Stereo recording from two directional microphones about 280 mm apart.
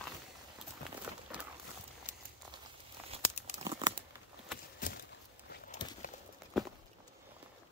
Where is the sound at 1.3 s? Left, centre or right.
Centre.